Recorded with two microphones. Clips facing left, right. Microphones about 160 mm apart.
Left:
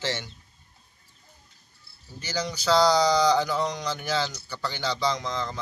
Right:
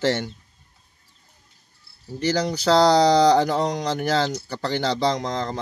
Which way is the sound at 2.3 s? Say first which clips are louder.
Right 6 dB; 60° right (ahead or behind).